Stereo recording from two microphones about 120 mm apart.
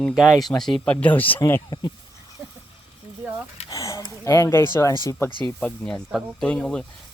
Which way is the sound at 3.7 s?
25° left (ahead or behind).